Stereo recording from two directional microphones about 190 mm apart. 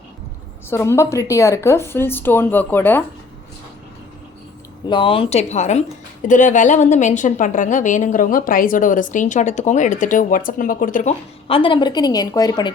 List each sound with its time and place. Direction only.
0.7 s speech: 15° left (ahead or behind)
4.9 s a woman's voice: 25° left (ahead or behind); by 11.1 s 45° left (ahead or behind)
11.4 s a woman's voice: 25° left (ahead or behind)